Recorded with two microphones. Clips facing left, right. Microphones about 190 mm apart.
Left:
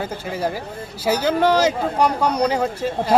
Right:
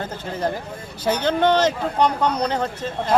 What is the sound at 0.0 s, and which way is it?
Speech, 10° left (ahead or behind).